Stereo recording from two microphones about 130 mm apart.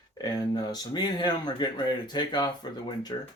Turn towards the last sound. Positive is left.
turn(degrees=35)  # may be behind; listen again after turning